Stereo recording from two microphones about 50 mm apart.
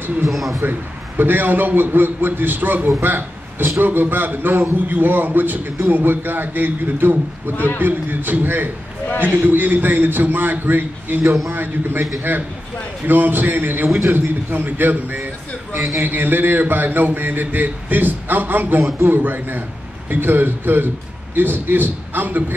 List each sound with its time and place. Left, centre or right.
0.3 s speech: centre
0.6 s a man's voice: right
7.5 s a man's voice: left
7.8 s a man's voice: right